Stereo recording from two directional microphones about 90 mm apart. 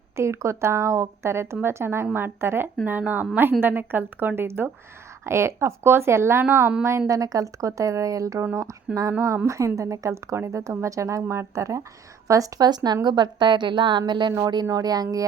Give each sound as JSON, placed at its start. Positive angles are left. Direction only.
{"t": 0.2, "sound": "a woman's voice", "side_deg": -30}
{"t": 7.1, "sound": "a woman's voice", "side_deg": -40}